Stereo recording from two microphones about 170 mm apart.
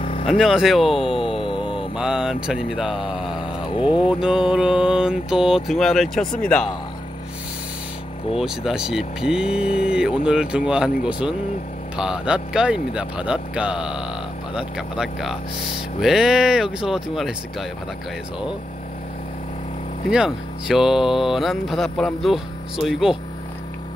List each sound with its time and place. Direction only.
0.0 s vehicle: 35° left (ahead or behind)
0.3 s speech: centre (ahead or behind)
3.7 s speech: 30° left (ahead or behind)
4.1 s speech: 5° right (ahead or behind)
8.4 s speech: 5° right (ahead or behind)
20.1 s speech: 5° right (ahead or behind)